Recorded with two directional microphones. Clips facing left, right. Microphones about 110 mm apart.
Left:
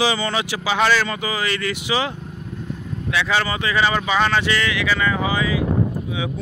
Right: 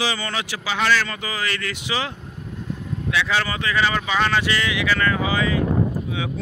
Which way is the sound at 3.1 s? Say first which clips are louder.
Left 2 dB; 5° left (ahead or behind).